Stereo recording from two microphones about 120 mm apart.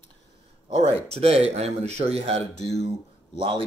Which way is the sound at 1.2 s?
60° right (ahead or behind).